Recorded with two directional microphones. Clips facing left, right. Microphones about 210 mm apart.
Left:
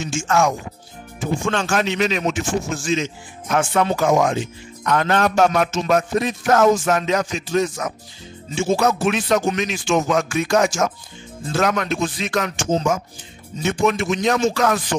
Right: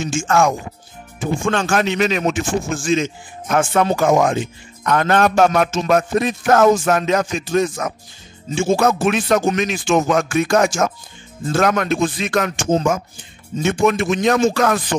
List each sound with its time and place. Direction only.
0.0 s music: 50° right (ahead or behind)